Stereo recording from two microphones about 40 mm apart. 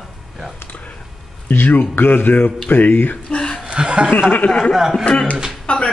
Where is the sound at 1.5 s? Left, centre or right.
Left.